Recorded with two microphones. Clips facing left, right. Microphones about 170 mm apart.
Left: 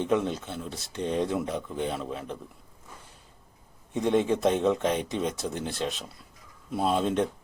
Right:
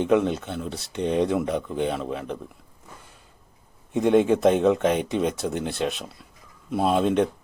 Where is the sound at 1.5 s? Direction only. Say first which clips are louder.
Right 5 dB; 65° right (ahead or behind).